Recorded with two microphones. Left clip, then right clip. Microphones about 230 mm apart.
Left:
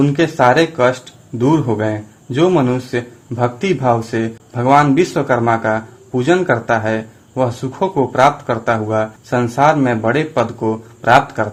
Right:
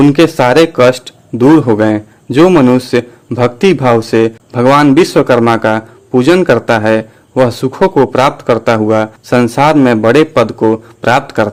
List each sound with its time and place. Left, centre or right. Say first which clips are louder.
0.0 s speech: right 5 dB; right